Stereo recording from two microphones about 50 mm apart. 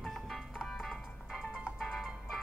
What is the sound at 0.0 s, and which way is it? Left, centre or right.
Music, centre.